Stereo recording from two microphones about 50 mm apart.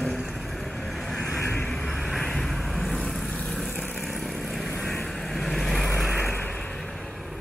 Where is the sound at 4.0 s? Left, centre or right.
Centre.